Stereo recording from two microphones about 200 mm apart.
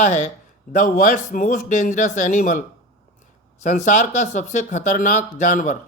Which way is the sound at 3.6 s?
40° left (ahead or behind).